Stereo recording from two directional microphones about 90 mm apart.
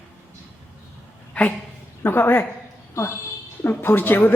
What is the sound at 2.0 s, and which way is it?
A woman's voice, 25° left (ahead or behind).